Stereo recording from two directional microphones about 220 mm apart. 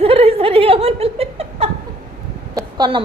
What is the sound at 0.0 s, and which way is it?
Laughter, 25° right (ahead or behind).